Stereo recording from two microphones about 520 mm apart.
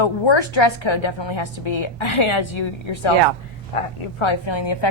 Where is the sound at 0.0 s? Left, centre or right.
Left.